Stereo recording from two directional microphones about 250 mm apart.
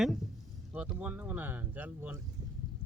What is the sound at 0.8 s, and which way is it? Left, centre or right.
Speech, centre.